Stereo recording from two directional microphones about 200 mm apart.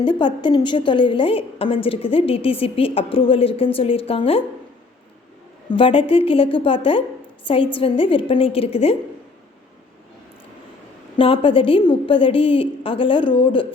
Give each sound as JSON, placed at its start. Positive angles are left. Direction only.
{"t": 0.0, "sound": "a woman's voice", "side_deg": 25}
{"t": 5.7, "sound": "a woman's voice", "side_deg": 25}
{"t": 11.2, "sound": "a woman's voice", "side_deg": 25}